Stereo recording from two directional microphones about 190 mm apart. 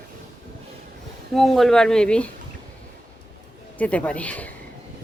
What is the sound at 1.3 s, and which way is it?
Speech, centre (ahead or behind).